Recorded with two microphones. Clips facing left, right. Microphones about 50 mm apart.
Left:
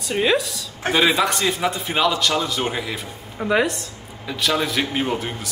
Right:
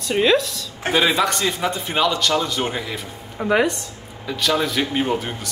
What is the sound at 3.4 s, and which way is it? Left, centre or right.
Speech, centre.